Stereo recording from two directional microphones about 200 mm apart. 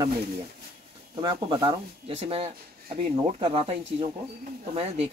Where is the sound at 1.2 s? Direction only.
25° right (ahead or behind).